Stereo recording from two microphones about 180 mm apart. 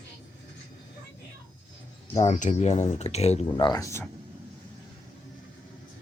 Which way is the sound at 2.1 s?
40° left (ahead or behind).